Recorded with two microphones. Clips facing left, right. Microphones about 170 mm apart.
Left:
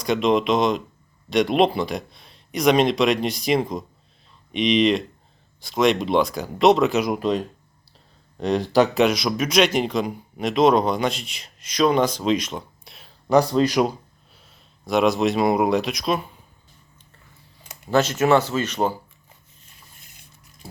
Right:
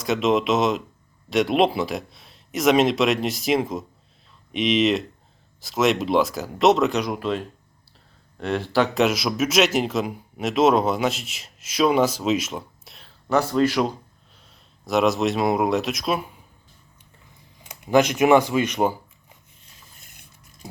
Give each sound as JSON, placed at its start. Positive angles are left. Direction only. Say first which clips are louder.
{"t": 0.0, "sound": "speech", "louder": "left 1 dB", "side_deg": 0}
{"t": 7.1, "sound": "speech", "louder": "left 3 dB", "side_deg": 15}
{"t": 8.4, "sound": "speech", "louder": "left 3 dB", "side_deg": 15}
{"t": 9.0, "sound": "speech", "louder": "left 1 dB", "side_deg": -5}
{"t": 13.2, "sound": "speech", "louder": "left 2 dB", "side_deg": 15}
{"t": 14.3, "sound": "speech", "louder": "left 1 dB", "side_deg": 0}
{"t": 17.7, "sound": "speech", "louder": "right 2 dB", "side_deg": -15}